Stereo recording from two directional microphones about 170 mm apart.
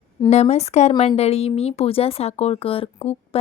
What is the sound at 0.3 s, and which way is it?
Speech, 40° left (ahead or behind).